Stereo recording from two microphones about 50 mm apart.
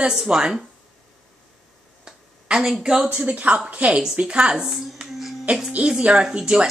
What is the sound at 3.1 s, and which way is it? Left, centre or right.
A woman's voice, right.